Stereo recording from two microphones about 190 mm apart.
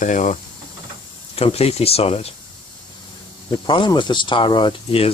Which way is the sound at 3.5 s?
25° left (ahead or behind).